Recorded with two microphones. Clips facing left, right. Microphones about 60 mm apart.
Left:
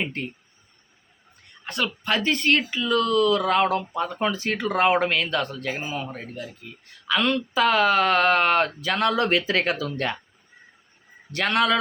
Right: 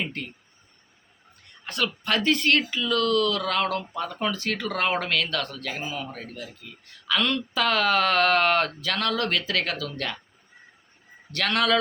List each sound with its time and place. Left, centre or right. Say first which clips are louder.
0.0 s speech: left 3 dB; centre
1.6 s speech: left 1 dB; centre; by 10.2 s left
11.3 s speech: left 2 dB; centre